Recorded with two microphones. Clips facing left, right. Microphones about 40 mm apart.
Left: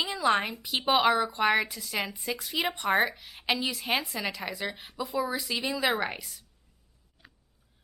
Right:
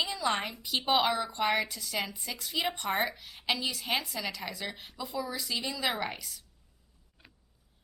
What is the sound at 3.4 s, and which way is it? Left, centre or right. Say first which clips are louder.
A woman's voice: left 3 dB; left.